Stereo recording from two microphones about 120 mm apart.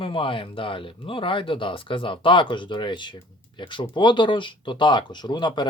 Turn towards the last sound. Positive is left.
turn(degrees=40)  # may be behind; listen again after turning